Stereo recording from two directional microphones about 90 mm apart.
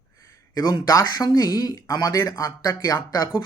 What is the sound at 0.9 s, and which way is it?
A man's voice, 45° left (ahead or behind).